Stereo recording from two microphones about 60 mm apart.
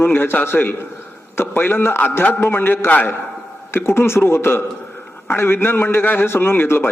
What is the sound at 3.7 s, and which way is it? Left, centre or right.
A man's voice, left.